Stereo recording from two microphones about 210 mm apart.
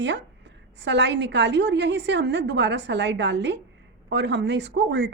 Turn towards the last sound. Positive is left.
turn(degrees=-55)  # may be behind; listen again after turning